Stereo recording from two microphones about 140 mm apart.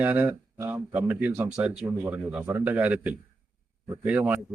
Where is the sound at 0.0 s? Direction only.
10° right (ahead or behind).